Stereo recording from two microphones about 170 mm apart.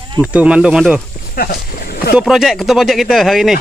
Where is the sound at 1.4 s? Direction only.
60° left (ahead or behind).